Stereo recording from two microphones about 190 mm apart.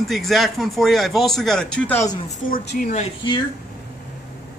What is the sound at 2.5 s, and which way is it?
Speech, 50° left (ahead or behind).